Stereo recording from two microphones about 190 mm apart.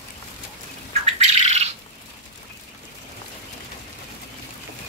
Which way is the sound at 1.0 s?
35° right (ahead or behind).